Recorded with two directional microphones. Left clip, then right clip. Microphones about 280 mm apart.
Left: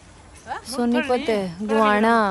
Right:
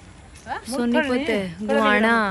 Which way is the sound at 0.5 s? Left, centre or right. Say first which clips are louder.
Even; centre.